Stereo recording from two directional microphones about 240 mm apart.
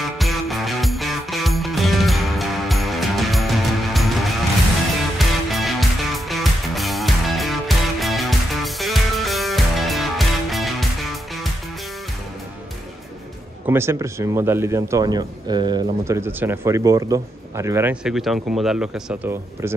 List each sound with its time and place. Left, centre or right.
0.2 s music: centre
5.5 s music: centre
13.7 s speech: centre